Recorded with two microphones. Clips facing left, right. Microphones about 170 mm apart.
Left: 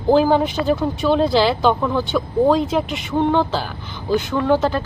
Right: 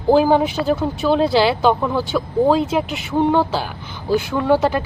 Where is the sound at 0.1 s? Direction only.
10° right (ahead or behind).